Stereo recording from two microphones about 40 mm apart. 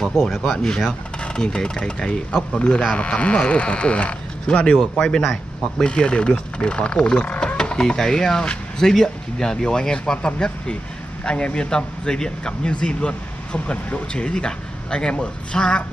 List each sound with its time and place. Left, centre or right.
0.0 s a man's voice: centre; by 4.7 s left
4.7 s speech: centre
5.6 s a man's voice: left